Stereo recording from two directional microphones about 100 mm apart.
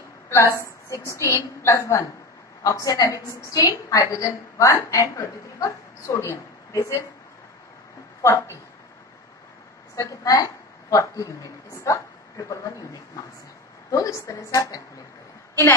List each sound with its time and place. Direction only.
0.6 s a woman's voice: 30° left (ahead or behind)
8.2 s a woman's voice: 30° left (ahead or behind)
9.9 s a woman's voice: 35° left (ahead or behind)